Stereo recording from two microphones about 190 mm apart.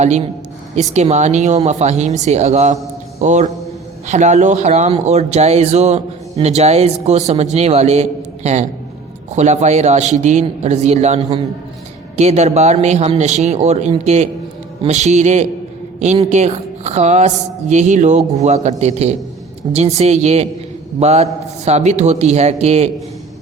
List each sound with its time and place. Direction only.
0.0 s speech: 35° right (ahead or behind)
9.3 s a woman's voice: 35° right (ahead or behind)